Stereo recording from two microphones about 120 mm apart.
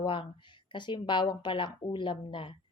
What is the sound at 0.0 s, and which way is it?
A woman's voice, 45° left (ahead or behind).